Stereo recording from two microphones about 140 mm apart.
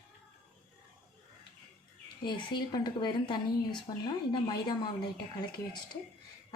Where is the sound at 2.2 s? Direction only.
30° left (ahead or behind).